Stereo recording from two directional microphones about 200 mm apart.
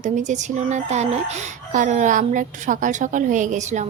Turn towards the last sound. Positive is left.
turn(degrees=-35)  # may be behind; listen again after turning